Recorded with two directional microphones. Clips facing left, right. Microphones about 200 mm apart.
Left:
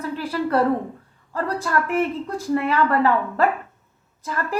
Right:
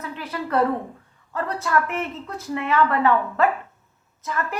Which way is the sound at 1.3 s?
35° left (ahead or behind).